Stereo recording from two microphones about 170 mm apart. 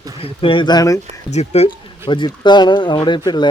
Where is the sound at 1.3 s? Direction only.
40° left (ahead or behind).